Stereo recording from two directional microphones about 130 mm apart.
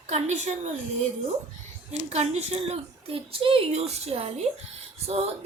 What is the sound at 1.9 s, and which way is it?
A woman's voice, 55° right (ahead or behind).